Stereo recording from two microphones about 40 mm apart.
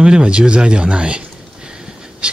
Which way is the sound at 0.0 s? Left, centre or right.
Right.